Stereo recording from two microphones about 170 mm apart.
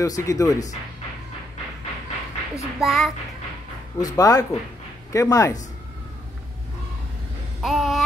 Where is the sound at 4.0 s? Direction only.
20° left (ahead or behind).